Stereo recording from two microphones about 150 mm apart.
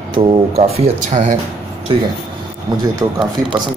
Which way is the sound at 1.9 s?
35° right (ahead or behind).